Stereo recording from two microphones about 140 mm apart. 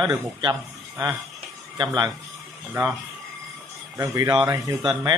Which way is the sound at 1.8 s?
30° right (ahead or behind).